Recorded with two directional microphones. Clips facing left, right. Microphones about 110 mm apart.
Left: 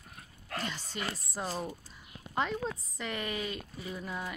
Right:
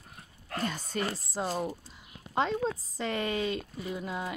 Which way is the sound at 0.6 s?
50° right (ahead or behind).